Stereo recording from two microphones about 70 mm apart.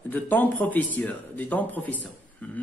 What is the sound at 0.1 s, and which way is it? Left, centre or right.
Speech, left.